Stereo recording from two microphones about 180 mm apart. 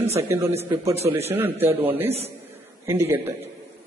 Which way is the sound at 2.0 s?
35° right (ahead or behind).